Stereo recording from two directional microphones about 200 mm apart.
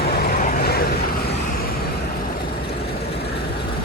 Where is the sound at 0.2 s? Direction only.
50° left (ahead or behind).